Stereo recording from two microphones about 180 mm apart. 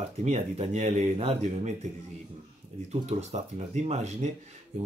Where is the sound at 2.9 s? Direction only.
40° right (ahead or behind).